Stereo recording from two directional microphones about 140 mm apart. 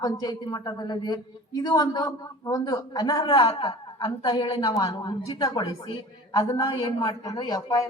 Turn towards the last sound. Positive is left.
turn(degrees=25)  # may be behind; listen again after turning